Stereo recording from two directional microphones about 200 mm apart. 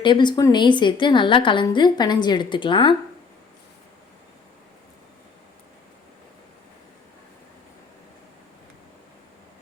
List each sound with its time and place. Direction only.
0.0 s a woman's voice: 25° left (ahead or behind)